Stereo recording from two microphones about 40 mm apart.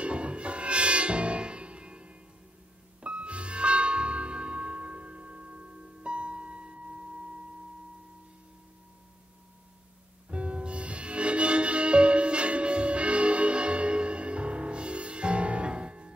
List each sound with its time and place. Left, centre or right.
0.0 s music: right
10.3 s music: right